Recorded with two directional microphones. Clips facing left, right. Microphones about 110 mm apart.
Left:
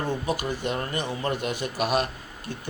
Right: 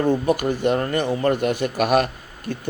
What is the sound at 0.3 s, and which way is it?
Speech, 55° right (ahead or behind).